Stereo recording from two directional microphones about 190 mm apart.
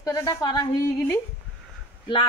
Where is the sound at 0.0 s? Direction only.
20° left (ahead or behind).